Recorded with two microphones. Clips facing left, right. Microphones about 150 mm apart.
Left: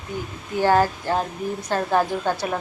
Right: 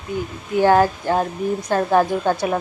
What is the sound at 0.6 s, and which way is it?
Speech, 15° right (ahead or behind).